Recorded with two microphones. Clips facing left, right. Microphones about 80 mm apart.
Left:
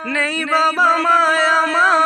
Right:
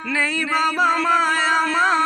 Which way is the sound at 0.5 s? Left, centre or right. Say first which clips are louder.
Left 5 dB; left.